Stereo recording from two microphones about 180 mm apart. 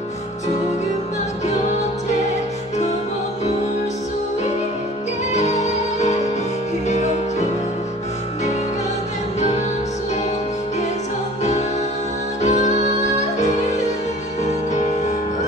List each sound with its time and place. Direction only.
5.3 s music: 40° left (ahead or behind)
12.4 s music: 40° left (ahead or behind)